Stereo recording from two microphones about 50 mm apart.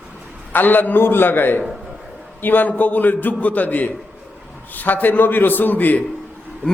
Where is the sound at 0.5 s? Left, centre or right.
Left.